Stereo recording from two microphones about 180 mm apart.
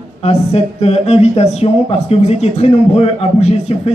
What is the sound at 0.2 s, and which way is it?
Speech, 35° left (ahead or behind).